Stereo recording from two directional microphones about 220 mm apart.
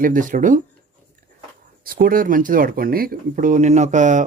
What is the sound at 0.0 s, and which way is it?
Speech, 35° right (ahead or behind).